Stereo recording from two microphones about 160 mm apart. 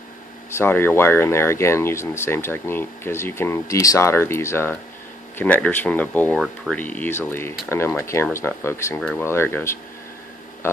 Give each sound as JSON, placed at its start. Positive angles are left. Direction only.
{"t": 0.5, "sound": "speech", "side_deg": 15}
{"t": 6.4, "sound": "speech", "side_deg": 0}
{"t": 6.8, "sound": "speech", "side_deg": 10}